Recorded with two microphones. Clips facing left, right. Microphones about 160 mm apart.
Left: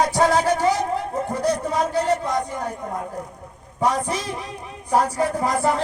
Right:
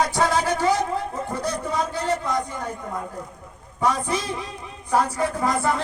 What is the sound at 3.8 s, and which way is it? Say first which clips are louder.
A man's voice: left 1 dB; 35° left (ahead or behind).